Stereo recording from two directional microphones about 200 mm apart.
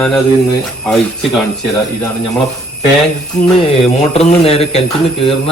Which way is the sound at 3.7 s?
30° left (ahead or behind).